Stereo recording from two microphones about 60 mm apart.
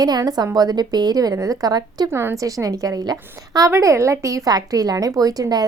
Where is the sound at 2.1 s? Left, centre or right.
Right.